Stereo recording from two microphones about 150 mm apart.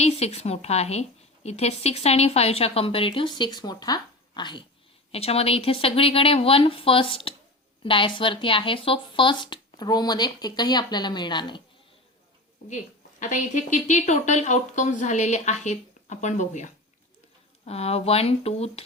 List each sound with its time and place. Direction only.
0.0 s a woman's voice: 45° left (ahead or behind)
5.1 s speech: 40° left (ahead or behind)
12.6 s a woman's voice: 55° left (ahead or behind)